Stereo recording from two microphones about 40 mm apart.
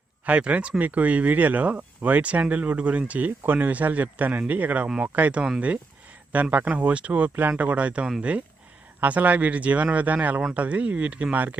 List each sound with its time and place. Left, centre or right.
0.3 s speech: right
9.0 s speech: right